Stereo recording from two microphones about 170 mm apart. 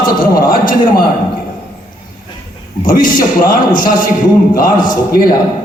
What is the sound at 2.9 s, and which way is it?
A man's voice, 55° left (ahead or behind).